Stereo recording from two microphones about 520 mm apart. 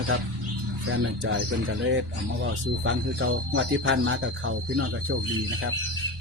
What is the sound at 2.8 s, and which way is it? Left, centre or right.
Speech, right.